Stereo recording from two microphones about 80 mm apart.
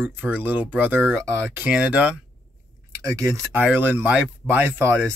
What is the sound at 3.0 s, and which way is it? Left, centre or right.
Speech, right.